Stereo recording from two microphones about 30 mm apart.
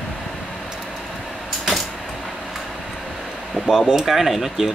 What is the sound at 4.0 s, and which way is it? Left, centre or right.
Speech, centre.